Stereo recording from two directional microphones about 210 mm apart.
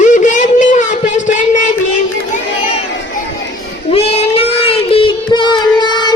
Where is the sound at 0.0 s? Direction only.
35° left (ahead or behind).